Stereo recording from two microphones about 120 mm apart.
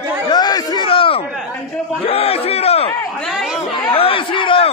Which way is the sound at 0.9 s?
50° left (ahead or behind).